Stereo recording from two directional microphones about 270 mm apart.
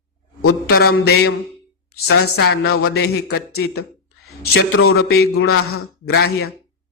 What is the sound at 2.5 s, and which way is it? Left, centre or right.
Speech, left.